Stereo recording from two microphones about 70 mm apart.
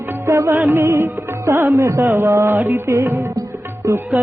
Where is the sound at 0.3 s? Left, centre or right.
Right.